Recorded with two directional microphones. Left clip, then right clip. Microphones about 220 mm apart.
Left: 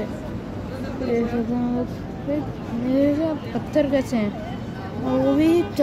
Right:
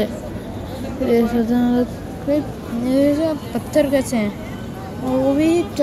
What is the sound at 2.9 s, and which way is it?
Speech, 5° right (ahead or behind).